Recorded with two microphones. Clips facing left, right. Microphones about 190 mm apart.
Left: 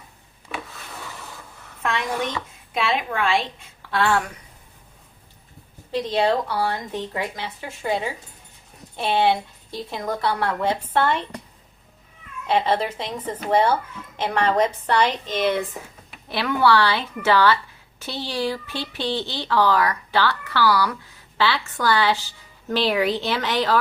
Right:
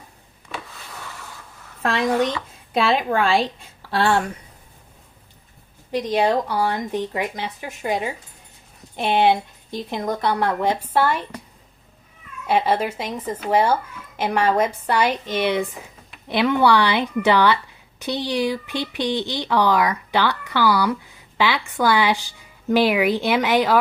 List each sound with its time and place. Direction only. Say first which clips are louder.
1.8 s a woman's voice: right 5 dB; 35° right (ahead or behind)
5.9 s speech: right 1 dB; 15° right (ahead or behind)
12.5 s speech: right 1 dB; 10° right (ahead or behind)